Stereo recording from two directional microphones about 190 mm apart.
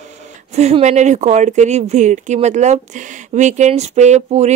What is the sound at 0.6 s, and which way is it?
Speech, 35° right (ahead or behind).